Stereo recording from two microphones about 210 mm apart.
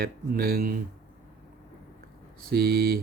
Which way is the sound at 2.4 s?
45° right (ahead or behind).